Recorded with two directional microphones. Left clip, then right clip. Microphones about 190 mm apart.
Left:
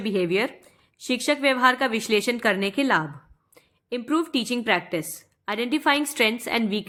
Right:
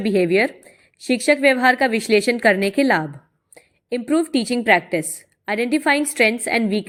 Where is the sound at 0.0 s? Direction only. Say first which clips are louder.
Right 6 dB; 20° right (ahead or behind).